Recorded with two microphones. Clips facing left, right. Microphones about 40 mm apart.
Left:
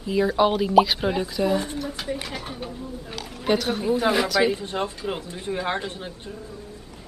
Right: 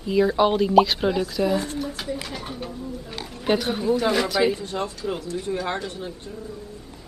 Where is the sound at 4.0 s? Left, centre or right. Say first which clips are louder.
Left 2 dB; centre.